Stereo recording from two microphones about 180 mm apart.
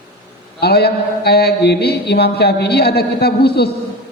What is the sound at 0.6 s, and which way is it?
Mantra, 65° left (ahead or behind).